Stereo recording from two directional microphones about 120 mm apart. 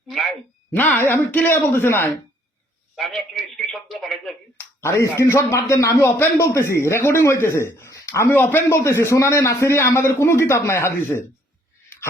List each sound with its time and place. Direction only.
0.1 s a sound: centre (ahead or behind)
0.7 s speech: 15° left (ahead or behind)
2.9 s a man's voice: centre (ahead or behind)
4.5 s a man's voice: 20° left (ahead or behind)